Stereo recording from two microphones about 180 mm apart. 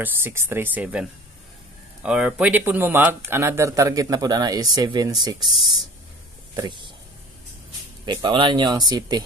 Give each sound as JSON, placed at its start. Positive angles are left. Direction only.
{"t": 0.0, "sound": "speech", "side_deg": -10}
{"t": 2.0, "sound": "speech", "side_deg": -5}
{"t": 6.5, "sound": "speech", "side_deg": -25}
{"t": 8.0, "sound": "speech", "side_deg": -25}